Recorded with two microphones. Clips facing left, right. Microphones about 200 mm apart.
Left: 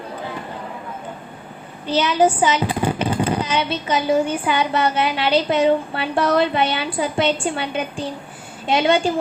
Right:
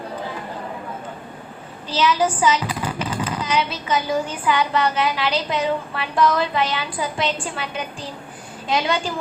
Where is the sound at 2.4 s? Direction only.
25° left (ahead or behind).